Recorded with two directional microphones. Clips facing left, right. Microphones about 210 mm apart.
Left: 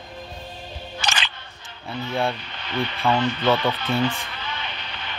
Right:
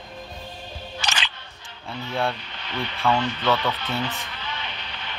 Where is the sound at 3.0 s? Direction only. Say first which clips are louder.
Left 1 dB; 15° left (ahead or behind).